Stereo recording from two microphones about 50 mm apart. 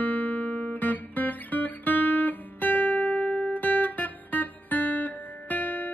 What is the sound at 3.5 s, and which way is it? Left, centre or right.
Music, left.